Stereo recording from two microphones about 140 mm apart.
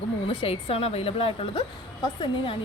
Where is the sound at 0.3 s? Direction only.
45° left (ahead or behind).